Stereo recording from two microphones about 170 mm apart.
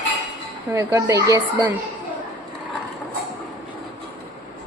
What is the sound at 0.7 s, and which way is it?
Speech, 20° right (ahead or behind).